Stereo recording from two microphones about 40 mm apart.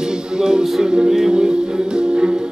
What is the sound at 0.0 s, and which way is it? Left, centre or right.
Music, centre.